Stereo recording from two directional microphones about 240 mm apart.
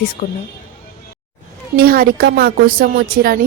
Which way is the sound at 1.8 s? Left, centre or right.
Right.